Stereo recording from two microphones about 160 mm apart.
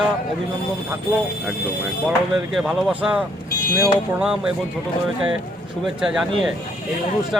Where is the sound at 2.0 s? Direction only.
Centre (ahead or behind).